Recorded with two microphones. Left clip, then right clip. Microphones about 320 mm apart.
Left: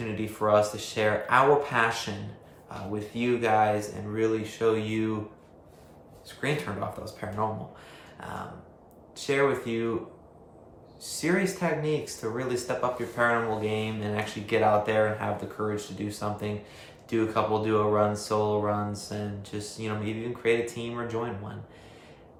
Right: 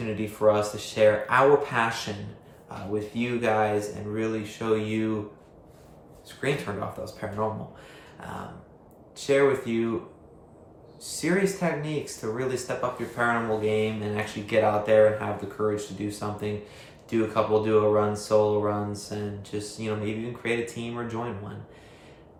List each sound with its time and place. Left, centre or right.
0.2 s speech: centre
6.2 s speech: centre
11.0 s speech: centre